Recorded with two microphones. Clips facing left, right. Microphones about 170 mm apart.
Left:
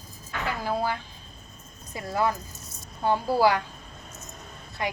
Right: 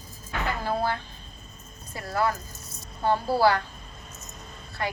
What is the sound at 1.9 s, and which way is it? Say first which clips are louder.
Speech: even; 15° left (ahead or behind).